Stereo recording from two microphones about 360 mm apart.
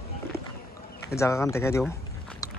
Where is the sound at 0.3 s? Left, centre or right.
Centre.